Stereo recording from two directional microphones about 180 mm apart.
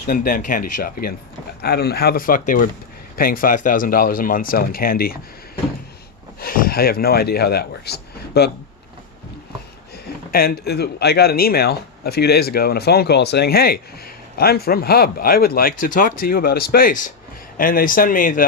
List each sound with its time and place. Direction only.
0.1 s a man's voice: 50° left (ahead or behind)
6.4 s speech: 55° left (ahead or behind)
10.3 s a man's voice: 60° left (ahead or behind)